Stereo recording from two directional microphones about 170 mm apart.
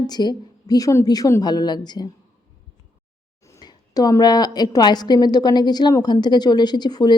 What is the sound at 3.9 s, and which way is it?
A woman's voice, 20° left (ahead or behind).